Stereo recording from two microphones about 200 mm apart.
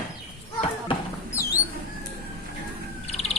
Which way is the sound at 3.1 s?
35° left (ahead or behind).